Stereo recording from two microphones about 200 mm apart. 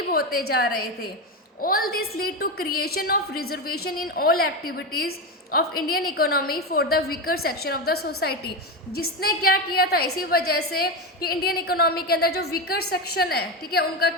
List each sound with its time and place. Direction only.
0.1 s a woman's voice: 50° left (ahead or behind)
9.0 s a woman's voice: 50° left (ahead or behind)